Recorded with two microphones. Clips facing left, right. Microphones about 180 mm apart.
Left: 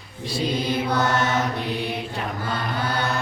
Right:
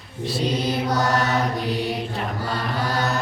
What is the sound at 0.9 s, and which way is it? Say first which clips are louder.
Mantra: right 1 dB; 40° right (ahead or behind).